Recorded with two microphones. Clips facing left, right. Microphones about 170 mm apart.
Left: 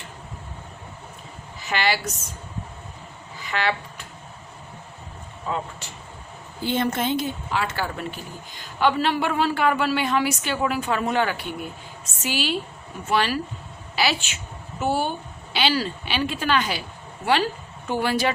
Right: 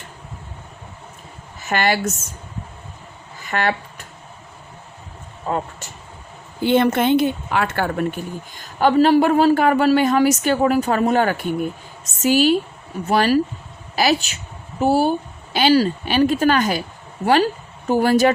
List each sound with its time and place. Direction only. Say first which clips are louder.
1.6 s speech: right 5 dB; 50° right (ahead or behind)
3.3 s a sound: right 4 dB; 50° right (ahead or behind)
5.5 s speech: right 5 dB; 45° right (ahead or behind)
6.6 s speech: right 8 dB; 70° right (ahead or behind); by 16.8 s 45° right (ahead or behind)
17.8 s speech: right 8 dB; 45° right (ahead or behind)